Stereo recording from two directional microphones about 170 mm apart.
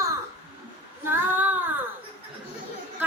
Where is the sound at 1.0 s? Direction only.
10° right (ahead or behind).